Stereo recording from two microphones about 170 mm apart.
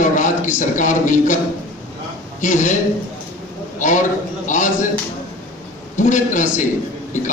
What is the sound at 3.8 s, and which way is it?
Speech, 45° left (ahead or behind).